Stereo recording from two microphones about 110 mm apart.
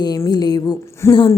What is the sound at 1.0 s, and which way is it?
Speech, 25° left (ahead or behind).